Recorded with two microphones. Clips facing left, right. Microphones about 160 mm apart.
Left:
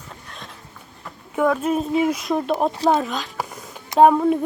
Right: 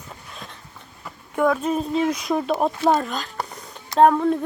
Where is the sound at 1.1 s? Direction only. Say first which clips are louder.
Even; centre (ahead or behind).